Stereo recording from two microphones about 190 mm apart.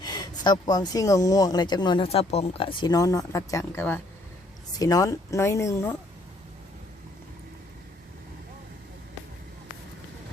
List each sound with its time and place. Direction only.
0.0 s speech: 20° left (ahead or behind)